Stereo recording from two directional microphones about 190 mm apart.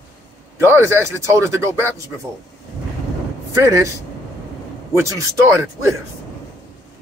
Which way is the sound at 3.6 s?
15° right (ahead or behind).